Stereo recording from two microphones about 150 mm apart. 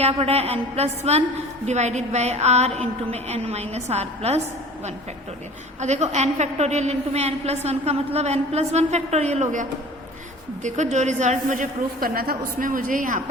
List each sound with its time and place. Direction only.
0.0 s a woman's voice: 45° right (ahead or behind)
5.8 s a woman's voice: 50° right (ahead or behind)